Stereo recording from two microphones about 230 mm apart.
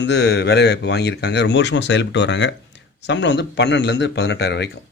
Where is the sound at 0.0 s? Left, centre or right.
Left.